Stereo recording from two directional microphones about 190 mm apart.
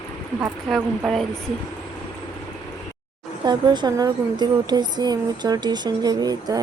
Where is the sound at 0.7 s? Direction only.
Centre (ahead or behind).